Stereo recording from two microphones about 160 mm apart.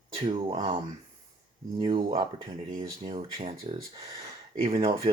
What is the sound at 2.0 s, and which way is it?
Speech, 35° right (ahead or behind).